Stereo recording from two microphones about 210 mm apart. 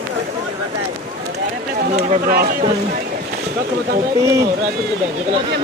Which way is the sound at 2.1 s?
45° right (ahead or behind).